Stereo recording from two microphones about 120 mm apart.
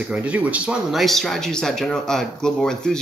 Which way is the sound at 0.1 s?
10° right (ahead or behind).